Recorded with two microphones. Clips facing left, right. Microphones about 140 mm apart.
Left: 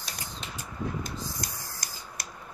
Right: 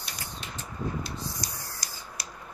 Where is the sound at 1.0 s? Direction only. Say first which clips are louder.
Even; 50° left (ahead or behind).